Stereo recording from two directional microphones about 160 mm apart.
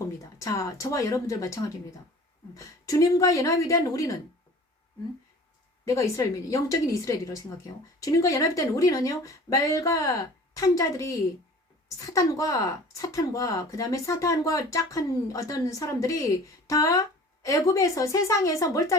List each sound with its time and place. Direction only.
0.0 s speech: 20° left (ahead or behind)
5.8 s speech: 20° left (ahead or behind)